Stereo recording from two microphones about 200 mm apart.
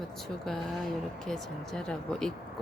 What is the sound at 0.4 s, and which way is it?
A woman's voice, centre (ahead or behind).